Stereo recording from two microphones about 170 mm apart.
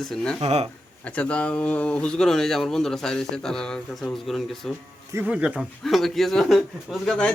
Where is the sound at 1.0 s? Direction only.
5° left (ahead or behind).